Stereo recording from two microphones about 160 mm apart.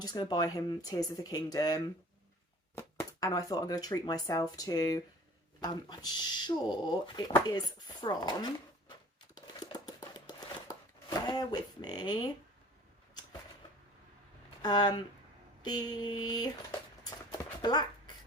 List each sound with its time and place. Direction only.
0.0 s speech: 25° left (ahead or behind)
9.3 s typing: 25° left (ahead or behind)
10.2 s shuffling cards: 25° left (ahead or behind)
14.6 s speech: 25° left (ahead or behind)
17.0 s a sound: 25° left (ahead or behind)